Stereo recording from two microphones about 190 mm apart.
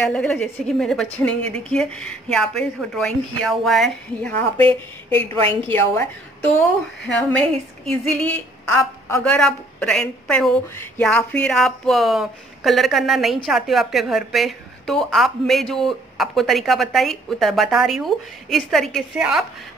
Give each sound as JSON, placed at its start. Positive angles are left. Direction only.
{"t": 0.1, "sound": "a woman's voice", "side_deg": 5}
{"t": 4.6, "sound": "speech", "side_deg": -30}
{"t": 5.7, "sound": "a woman's voice", "side_deg": 10}
{"t": 7.2, "sound": "a woman's voice", "side_deg": 5}